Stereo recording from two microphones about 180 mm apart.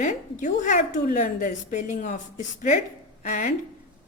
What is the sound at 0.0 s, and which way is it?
A woman's voice, 45° left (ahead or behind).